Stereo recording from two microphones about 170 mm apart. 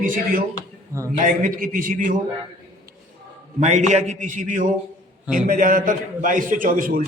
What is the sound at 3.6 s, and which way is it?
A man's voice, 45° right (ahead or behind).